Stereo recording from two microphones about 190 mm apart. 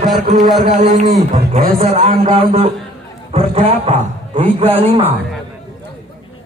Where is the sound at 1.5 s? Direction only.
35° right (ahead or behind).